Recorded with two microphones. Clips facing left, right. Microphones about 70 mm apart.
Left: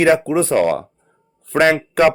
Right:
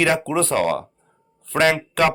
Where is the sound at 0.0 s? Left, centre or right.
Left.